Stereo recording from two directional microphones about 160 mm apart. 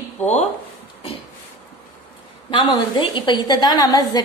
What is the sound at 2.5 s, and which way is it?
A woman's voice, 30° left (ahead or behind).